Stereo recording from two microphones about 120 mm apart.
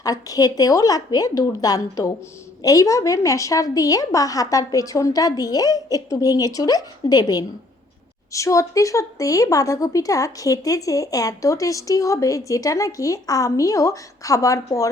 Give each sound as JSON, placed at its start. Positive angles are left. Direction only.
{"t": 0.0, "sound": "a woman's voice", "side_deg": 30}